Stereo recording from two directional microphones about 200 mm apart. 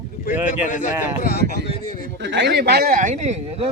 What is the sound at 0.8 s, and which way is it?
Speech, 45° left (ahead or behind).